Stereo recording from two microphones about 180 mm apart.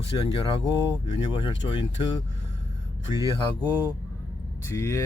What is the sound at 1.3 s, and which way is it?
Speech, 25° left (ahead or behind).